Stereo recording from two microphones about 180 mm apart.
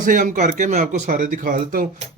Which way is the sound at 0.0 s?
45° right (ahead or behind).